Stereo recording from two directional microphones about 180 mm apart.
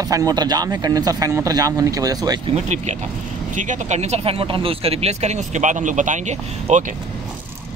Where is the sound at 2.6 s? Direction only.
40° right (ahead or behind).